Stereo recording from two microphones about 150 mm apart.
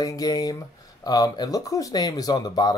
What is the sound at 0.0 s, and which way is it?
Speech, 25° left (ahead or behind).